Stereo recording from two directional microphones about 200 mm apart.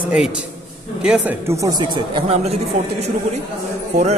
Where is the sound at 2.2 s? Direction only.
30° right (ahead or behind).